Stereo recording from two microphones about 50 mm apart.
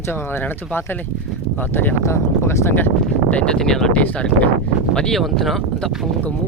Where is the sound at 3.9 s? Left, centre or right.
Left.